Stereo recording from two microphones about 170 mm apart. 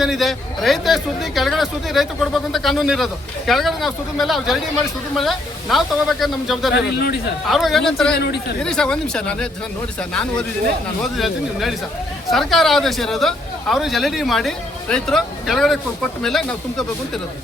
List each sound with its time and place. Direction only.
0.0 s speech: centre (ahead or behind)
6.7 s speech: 75° left (ahead or behind)
7.4 s speech: centre (ahead or behind)
8.1 s speech: 75° left (ahead or behind)
8.6 s speech: 5° left (ahead or behind)